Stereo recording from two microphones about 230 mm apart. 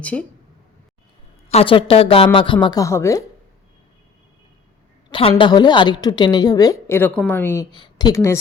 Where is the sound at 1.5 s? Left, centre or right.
Left.